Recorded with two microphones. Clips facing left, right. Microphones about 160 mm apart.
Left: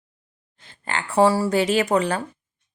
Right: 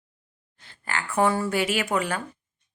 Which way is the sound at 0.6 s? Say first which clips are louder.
Left 3 dB; 20° left (ahead or behind).